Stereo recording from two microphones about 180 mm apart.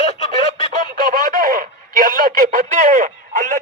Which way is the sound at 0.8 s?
50° right (ahead or behind).